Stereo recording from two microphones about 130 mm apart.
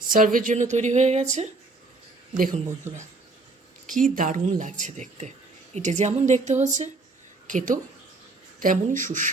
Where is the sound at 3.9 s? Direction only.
90° right; by 6.9 s 65° right (ahead or behind).